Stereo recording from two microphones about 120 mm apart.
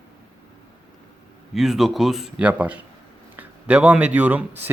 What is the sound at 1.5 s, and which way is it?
A man's voice, centre (ahead or behind).